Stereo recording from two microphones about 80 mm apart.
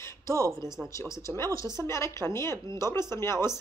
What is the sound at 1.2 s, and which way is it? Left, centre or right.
A woman's voice, left.